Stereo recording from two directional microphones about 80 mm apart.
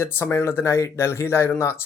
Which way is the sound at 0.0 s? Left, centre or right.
Left.